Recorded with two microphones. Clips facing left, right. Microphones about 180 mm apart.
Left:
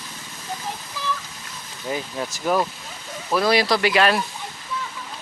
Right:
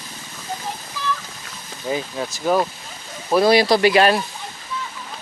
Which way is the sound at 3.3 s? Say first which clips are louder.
Right 5 dB; 30° right (ahead or behind).